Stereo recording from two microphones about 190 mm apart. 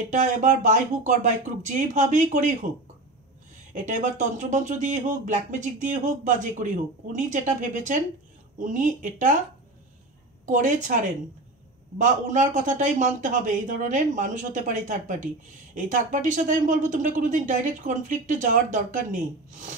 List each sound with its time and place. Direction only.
0.1 s speech: 40° right (ahead or behind)
3.7 s speech: 40° right (ahead or behind)
10.4 s speech: 40° right (ahead or behind)
12.0 s speech: 40° right (ahead or behind)